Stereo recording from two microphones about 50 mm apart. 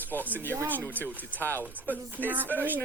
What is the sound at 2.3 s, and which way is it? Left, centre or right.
Speech, right.